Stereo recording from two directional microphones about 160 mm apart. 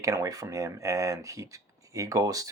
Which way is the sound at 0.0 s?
20° right (ahead or behind).